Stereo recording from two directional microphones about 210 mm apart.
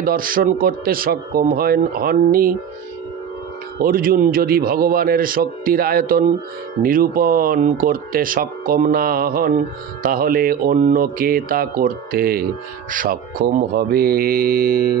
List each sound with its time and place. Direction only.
0.0 s speech: 40° right (ahead or behind)
3.8 s speech: 45° right (ahead or behind)